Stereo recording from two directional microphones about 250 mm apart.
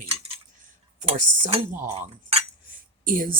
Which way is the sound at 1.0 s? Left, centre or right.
Right.